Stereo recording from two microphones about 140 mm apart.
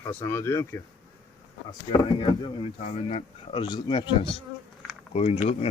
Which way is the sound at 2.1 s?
35° left (ahead or behind).